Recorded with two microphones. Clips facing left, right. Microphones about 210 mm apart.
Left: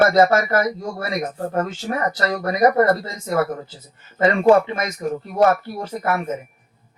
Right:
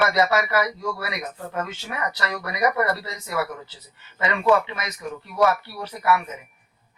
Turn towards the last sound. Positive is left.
turn(degrees=45)  # may be behind; listen again after turning